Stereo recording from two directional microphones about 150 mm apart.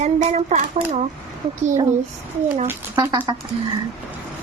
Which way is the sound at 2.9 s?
25° right (ahead or behind).